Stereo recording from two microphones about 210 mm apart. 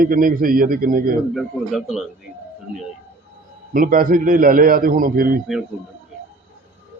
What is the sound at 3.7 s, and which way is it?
A man's voice, 40° right (ahead or behind).